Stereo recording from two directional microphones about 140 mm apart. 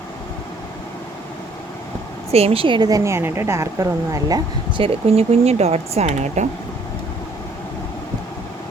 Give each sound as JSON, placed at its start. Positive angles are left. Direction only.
{"t": 2.3, "sound": "a woman's voice", "side_deg": -45}
{"t": 4.8, "sound": "speech", "side_deg": -45}